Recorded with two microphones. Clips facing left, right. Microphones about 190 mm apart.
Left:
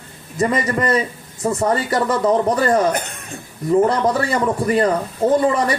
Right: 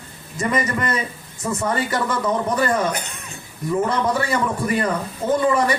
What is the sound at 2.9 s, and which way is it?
Speech, 50° left (ahead or behind).